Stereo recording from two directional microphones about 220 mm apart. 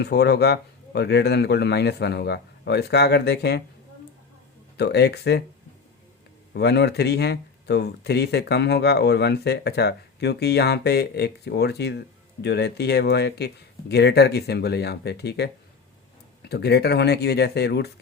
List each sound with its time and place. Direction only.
0.0 s speech: 50° left (ahead or behind)
4.8 s speech: 50° left (ahead or behind)
6.5 s speech: 50° left (ahead or behind)